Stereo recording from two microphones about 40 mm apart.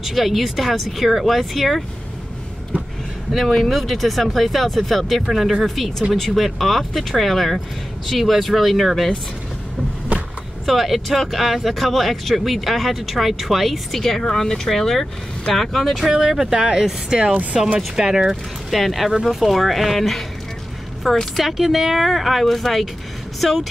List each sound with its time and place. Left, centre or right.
0.0 s speech: centre
3.3 s speech: centre
10.7 s speech: centre
16.5 s speech: right
17.2 s speech: right
17.7 s speech: centre
18.7 s speech: centre
21.0 s speech: centre